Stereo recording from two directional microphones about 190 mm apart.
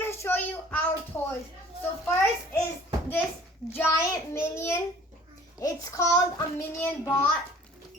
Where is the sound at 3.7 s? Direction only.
15° left (ahead or behind).